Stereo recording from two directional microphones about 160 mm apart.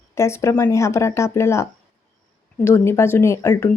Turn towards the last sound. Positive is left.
turn(degrees=15)  # may be behind; listen again after turning